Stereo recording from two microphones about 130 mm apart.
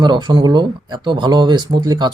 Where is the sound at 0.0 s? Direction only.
35° right (ahead or behind).